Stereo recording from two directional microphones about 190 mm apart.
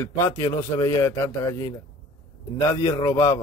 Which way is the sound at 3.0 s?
30° left (ahead or behind).